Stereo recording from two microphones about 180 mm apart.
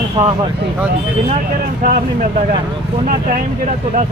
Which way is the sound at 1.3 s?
50° right (ahead or behind).